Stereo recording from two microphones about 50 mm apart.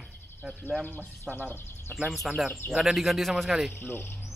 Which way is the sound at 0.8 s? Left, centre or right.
Left.